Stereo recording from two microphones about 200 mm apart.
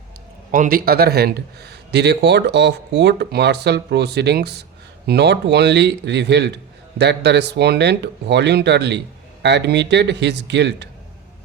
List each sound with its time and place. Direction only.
0.5 s speech: 45° right (ahead or behind)